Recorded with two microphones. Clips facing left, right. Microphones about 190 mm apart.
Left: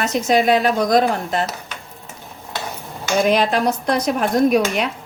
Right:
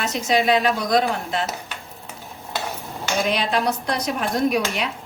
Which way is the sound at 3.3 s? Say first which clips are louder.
Left 5 dB; 45° left (ahead or behind).